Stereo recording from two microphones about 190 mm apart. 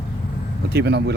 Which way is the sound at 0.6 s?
60° right (ahead or behind).